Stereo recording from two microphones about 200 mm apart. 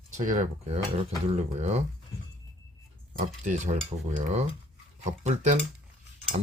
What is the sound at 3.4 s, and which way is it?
Speech, 40° right (ahead or behind).